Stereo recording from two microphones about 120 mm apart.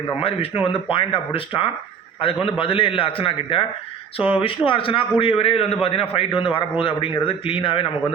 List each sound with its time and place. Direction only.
0.6 s a man's voice: 50° left (ahead or behind)